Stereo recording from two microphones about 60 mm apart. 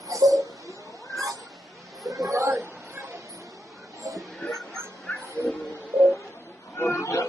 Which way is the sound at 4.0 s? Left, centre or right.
Right.